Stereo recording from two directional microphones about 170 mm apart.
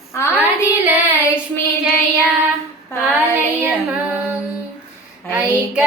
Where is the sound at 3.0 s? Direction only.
10° right (ahead or behind).